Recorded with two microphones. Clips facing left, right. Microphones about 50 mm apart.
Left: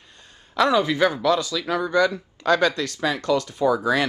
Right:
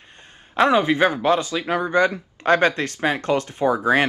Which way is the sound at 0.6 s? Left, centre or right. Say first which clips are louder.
Right 2 dB; right.